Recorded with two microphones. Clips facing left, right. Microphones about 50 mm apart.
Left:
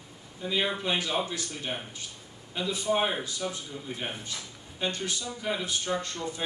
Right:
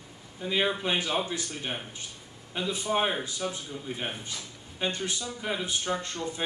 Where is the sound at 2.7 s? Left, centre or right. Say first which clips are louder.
Left 2 dB; right.